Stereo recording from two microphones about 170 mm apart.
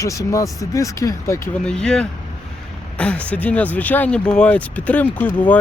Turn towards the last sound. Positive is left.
turn(degrees=10)  # may be behind; listen again after turning